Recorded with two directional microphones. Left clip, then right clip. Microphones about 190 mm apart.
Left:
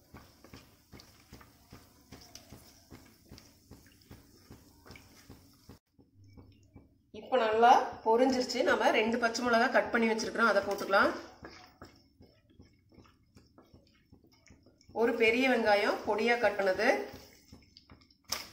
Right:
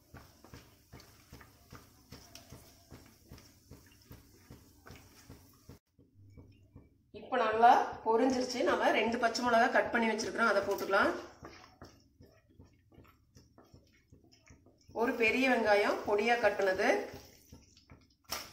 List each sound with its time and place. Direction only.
7.1 s a woman's voice: 25° left (ahead or behind)
15.0 s a woman's voice: 25° left (ahead or behind)